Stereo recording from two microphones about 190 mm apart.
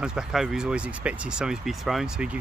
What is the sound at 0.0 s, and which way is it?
Speech, 5° right (ahead or behind).